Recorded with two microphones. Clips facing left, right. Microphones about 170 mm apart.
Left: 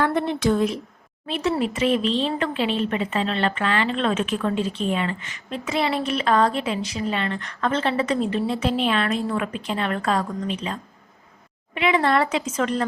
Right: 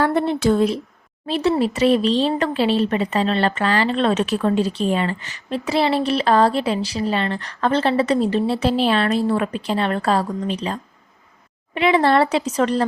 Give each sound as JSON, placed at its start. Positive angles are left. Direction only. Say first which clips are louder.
{"t": 0.0, "sound": "speech", "louder": "right 3 dB", "side_deg": -35}